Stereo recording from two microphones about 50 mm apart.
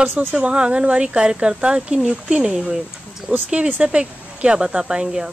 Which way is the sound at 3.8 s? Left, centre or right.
Right.